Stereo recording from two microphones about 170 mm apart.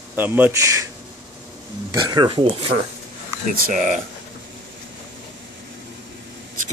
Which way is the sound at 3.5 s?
50° right (ahead or behind).